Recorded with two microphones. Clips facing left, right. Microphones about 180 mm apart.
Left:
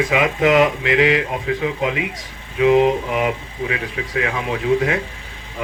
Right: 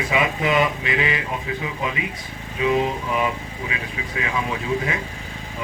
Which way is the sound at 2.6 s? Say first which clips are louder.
Left 7 dB; 80° left.